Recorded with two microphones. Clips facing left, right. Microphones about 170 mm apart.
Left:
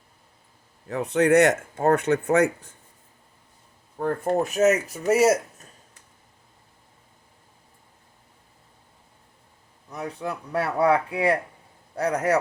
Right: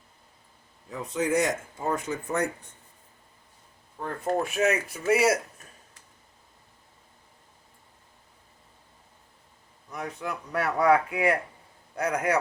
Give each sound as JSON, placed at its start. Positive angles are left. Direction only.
{"t": 0.9, "sound": "speech", "side_deg": 70}
{"t": 3.9, "sound": "speech", "side_deg": 50}
{"t": 9.9, "sound": "speech", "side_deg": 30}